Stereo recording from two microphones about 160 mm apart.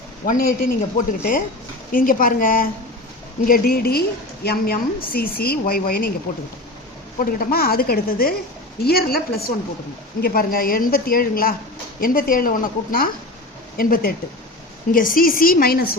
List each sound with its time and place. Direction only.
0.3 s a woman's voice: 65° left (ahead or behind)
7.2 s a woman's voice: 65° left (ahead or behind)